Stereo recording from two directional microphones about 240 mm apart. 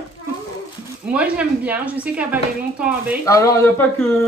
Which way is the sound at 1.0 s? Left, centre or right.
Centre.